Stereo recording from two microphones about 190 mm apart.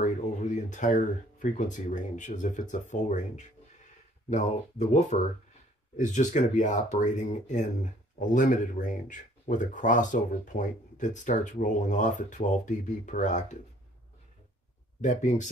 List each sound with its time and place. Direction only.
0.0 s speech: 40° left (ahead or behind)
15.0 s speech: 40° left (ahead or behind)